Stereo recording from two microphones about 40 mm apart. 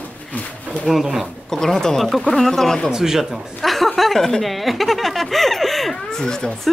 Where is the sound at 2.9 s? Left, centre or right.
Centre.